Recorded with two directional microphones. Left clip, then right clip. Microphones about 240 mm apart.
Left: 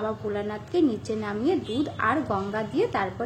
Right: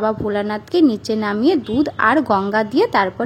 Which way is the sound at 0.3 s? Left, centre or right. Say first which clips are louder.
Right 9 dB; right.